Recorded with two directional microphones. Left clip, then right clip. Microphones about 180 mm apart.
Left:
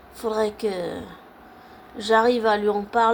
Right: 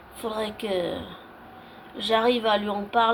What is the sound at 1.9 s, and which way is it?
Speech, 45° left (ahead or behind).